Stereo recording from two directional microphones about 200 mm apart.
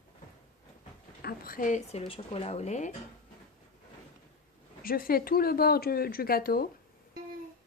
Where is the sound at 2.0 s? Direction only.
30° left (ahead or behind).